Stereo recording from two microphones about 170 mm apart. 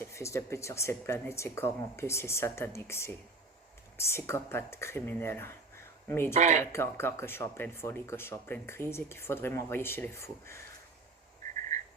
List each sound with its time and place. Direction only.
0.0 s speech: 15° left (ahead or behind)
6.3 s speech: 45° right (ahead or behind)
6.6 s speech: 15° left (ahead or behind)